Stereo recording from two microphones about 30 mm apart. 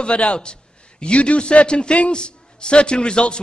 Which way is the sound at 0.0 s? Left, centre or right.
Left.